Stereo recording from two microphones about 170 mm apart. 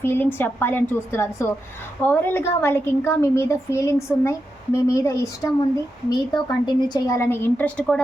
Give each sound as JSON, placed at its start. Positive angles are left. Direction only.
{"t": 0.0, "sound": "a woman's voice", "side_deg": 15}